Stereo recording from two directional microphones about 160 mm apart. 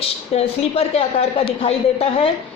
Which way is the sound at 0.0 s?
40° left (ahead or behind).